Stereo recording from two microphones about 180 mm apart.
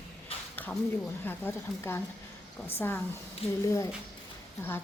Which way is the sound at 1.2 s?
10° left (ahead or behind).